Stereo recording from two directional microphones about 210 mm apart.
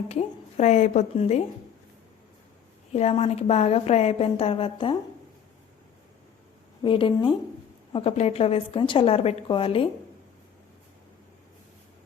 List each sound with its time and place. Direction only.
0.1 s a woman's voice: 30° left (ahead or behind)
2.9 s a woman's voice: 30° left (ahead or behind)
6.8 s a woman's voice: 25° left (ahead or behind)